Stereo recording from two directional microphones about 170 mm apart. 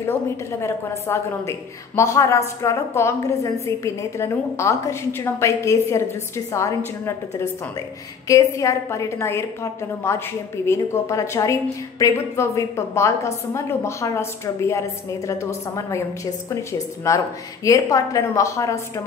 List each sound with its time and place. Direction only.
0.0 s a woman's voice: 15° left (ahead or behind)
8.3 s a woman's voice: 20° left (ahead or behind)